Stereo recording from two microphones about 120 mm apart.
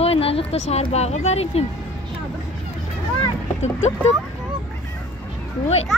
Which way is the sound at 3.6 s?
70° left (ahead or behind).